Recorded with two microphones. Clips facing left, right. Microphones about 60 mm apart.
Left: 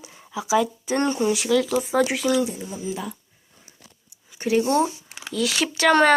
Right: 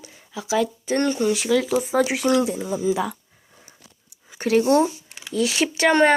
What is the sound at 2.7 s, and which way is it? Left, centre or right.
Speech, right.